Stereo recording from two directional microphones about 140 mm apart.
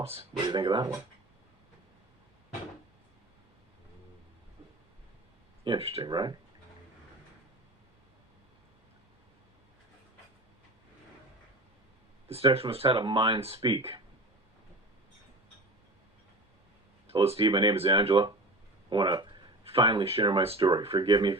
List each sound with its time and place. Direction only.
0.0 s speech: 45° right (ahead or behind)
5.6 s speech: 40° right (ahead or behind)
6.1 s speech: 30° right (ahead or behind)
12.3 s speech: 40° right (ahead or behind)
17.1 s speech: 45° right (ahead or behind)